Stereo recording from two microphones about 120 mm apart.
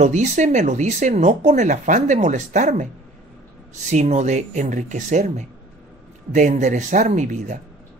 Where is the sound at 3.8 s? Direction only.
70° right (ahead or behind); by 7.6 s 90° right.